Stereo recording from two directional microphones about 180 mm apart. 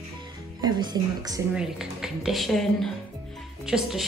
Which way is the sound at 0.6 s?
25° right (ahead or behind).